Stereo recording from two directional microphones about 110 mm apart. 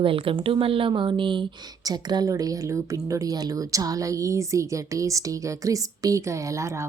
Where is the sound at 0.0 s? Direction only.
55° right (ahead or behind).